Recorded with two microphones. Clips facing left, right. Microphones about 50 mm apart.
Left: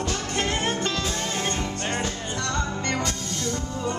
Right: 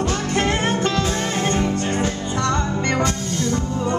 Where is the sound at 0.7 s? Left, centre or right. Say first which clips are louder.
Right 6 dB; centre.